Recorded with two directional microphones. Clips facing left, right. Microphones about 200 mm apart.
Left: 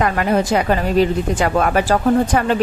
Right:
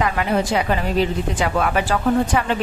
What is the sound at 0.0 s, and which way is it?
A woman's voice, 50° left (ahead or behind).